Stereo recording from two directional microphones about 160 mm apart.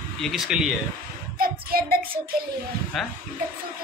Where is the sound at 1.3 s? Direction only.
70° right (ahead or behind).